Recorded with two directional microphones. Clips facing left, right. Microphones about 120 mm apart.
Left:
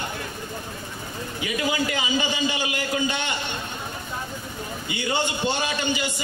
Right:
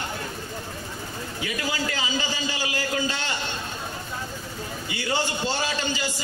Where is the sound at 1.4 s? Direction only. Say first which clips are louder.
Left 4 dB; 20° left (ahead or behind).